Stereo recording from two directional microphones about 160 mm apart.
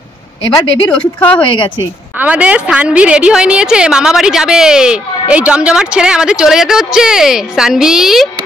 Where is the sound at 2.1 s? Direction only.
10° right (ahead or behind).